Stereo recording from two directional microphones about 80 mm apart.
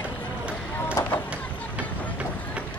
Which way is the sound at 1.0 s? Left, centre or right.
Left.